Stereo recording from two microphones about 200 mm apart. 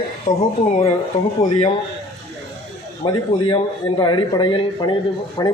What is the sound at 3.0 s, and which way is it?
Speech, 25° left (ahead or behind).